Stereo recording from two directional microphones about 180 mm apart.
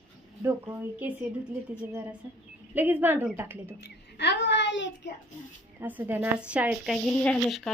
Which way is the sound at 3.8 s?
70° left (ahead or behind).